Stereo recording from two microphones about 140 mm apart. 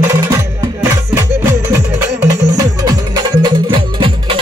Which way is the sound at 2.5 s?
25° right (ahead or behind).